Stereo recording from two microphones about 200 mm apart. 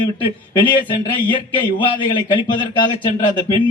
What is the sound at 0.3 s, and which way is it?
A man's voice, 25° left (ahead or behind).